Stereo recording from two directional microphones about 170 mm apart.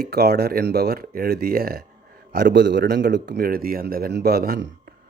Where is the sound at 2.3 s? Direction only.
85° right.